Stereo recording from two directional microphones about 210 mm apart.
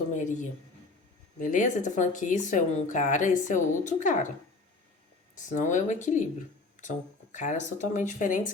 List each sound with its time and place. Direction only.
0.1 s speech: 35° left (ahead or behind)
5.3 s speech: 35° left (ahead or behind)
7.3 s speech: 35° left (ahead or behind)